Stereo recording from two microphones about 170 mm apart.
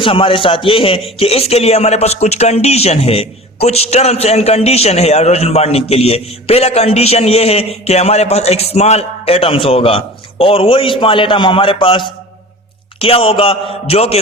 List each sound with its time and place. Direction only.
0.0 s a man's voice: 30° left (ahead or behind)